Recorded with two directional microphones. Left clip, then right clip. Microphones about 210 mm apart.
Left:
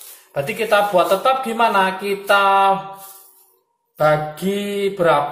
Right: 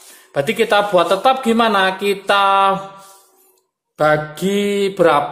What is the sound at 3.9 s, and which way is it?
A woman's voice, 50° right (ahead or behind).